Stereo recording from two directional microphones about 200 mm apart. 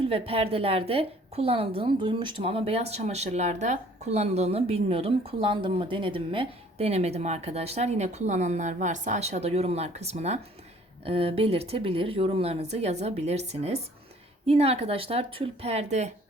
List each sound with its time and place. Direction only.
0.0 s a woman's voice: 30° right (ahead or behind)